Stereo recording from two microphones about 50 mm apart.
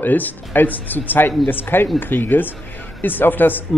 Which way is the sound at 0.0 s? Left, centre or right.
Left.